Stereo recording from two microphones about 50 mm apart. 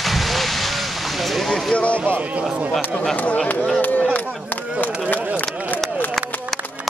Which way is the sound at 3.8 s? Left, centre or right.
Left.